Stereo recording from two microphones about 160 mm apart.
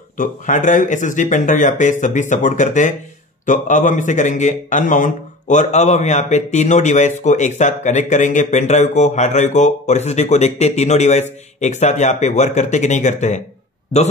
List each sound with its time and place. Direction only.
0.2 s a man's voice: 55° left (ahead or behind)